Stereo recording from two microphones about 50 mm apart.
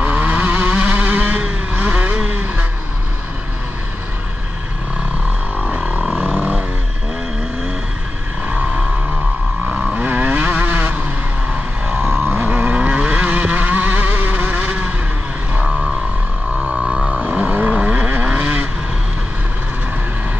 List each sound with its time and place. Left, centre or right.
0.0 s vehicle: right
5.8 s vehicle: centre
9.7 s vehicle: right
10.0 s vehicle: right
11.5 s a sound: centre
12.4 s vehicle: right
17.2 s vehicle: right